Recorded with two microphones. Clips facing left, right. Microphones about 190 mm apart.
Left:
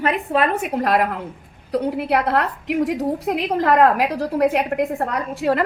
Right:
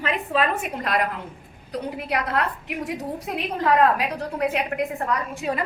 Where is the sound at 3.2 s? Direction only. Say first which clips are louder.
Left 3 dB; 80° left.